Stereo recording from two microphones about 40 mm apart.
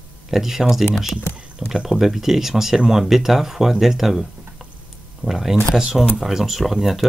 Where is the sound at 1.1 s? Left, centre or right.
Left.